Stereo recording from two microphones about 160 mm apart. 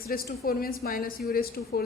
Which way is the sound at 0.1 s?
65° left (ahead or behind).